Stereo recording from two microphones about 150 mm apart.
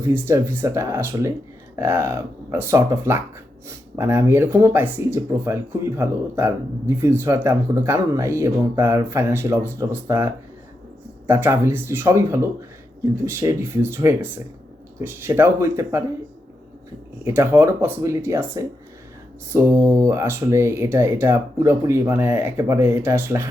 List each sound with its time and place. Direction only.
0.0 s speech: 15° right (ahead or behind)
17.2 s speech: 15° right (ahead or behind)